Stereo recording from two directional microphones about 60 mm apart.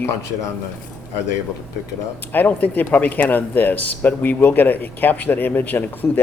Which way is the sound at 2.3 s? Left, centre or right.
Left.